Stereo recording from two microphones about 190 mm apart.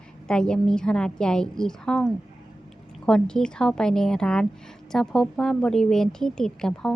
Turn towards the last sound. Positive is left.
turn(degrees=5)  # may be behind; listen again after turning